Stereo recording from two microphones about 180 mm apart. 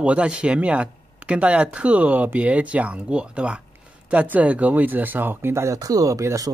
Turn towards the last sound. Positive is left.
turn(degrees=-20)  # may be behind; listen again after turning